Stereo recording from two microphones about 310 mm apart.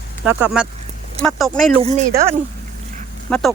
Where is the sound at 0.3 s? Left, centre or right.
Centre.